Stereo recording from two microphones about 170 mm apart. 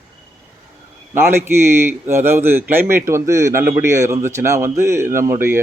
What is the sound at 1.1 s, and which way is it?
Speech, 15° right (ahead or behind).